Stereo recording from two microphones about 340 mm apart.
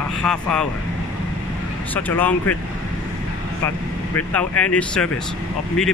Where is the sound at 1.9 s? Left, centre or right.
Centre.